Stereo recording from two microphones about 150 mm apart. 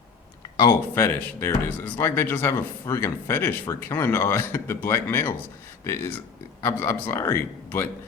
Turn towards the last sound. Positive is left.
turn(degrees=15)  # may be behind; listen again after turning